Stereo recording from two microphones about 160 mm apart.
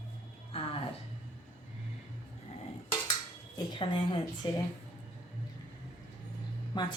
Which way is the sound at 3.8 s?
30° left (ahead or behind).